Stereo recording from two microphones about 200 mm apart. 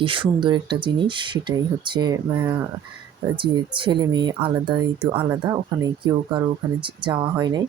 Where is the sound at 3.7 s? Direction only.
25° right (ahead or behind).